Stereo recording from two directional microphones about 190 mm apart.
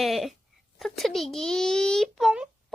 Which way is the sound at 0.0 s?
Centre (ahead or behind).